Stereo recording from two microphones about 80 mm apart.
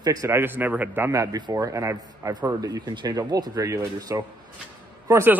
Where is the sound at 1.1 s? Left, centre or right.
Right.